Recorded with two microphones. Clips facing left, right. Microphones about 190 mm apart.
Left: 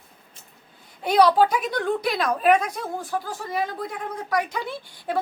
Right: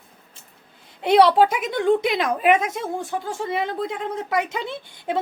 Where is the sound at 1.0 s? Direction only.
25° right (ahead or behind).